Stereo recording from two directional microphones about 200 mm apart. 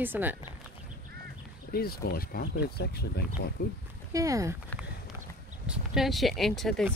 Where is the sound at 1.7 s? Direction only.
50° left (ahead or behind).